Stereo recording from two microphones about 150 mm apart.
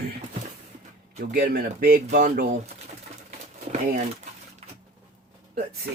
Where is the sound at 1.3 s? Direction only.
70° right (ahead or behind).